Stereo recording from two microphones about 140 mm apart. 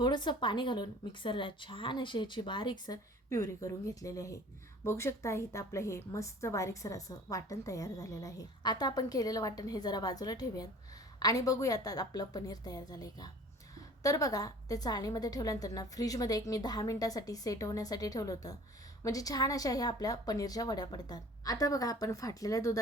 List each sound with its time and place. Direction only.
0.0 s a woman's voice: 35° left (ahead or behind)